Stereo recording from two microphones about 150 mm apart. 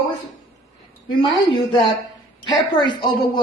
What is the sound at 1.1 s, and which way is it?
A woman's voice, 35° left (ahead or behind).